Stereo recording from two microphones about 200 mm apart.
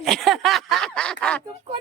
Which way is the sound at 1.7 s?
30° right (ahead or behind).